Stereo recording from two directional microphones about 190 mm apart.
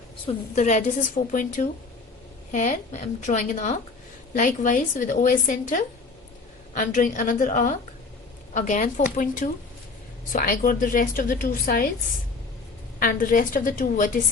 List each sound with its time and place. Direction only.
0.5 s a woman's voice: 40° left (ahead or behind)
13.0 s a woman's voice: 45° left (ahead or behind)